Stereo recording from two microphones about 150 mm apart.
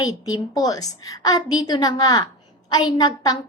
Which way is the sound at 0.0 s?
25° left (ahead or behind).